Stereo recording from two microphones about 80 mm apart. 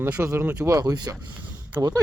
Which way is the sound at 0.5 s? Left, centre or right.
Right.